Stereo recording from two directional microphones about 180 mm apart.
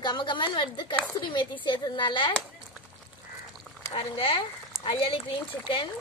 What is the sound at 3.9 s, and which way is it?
A woman's voice, 30° left (ahead or behind).